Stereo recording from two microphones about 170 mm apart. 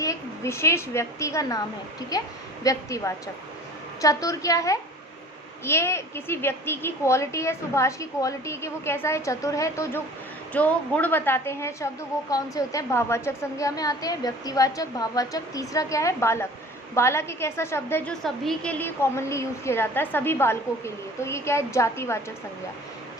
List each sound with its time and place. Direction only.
0.0 s a woman's voice: 15° left (ahead or behind)